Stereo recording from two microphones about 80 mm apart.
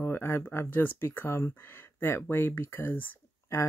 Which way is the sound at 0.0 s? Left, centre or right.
Left.